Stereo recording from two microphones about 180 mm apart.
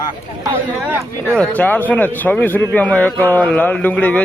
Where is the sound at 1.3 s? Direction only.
5° left (ahead or behind).